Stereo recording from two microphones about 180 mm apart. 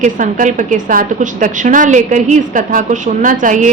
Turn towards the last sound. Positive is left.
turn(degrees=-45)  # may be behind; listen again after turning